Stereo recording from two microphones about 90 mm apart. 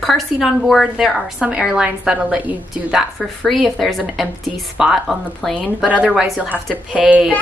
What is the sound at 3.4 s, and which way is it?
A woman's voice, centre (ahead or behind).